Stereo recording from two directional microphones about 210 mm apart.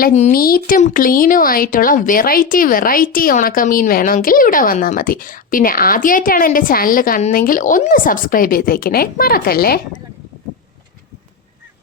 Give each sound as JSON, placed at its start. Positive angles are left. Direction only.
{"t": 0.0, "sound": "speech", "side_deg": 35}